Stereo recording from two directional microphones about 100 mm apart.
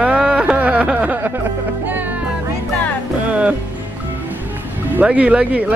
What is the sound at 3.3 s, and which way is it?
Speech, 10° right (ahead or behind).